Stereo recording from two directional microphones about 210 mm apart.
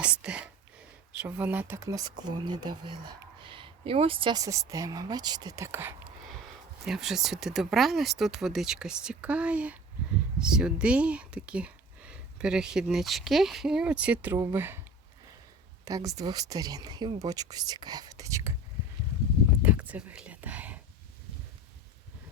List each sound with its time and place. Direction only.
0.0 s speech: 5° right (ahead or behind)
15.8 s speech: 15° right (ahead or behind)
19.6 s whispering: 5° right (ahead or behind)